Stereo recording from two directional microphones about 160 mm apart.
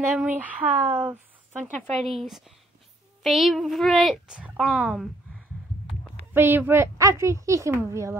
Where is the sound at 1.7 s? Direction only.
5° left (ahead or behind).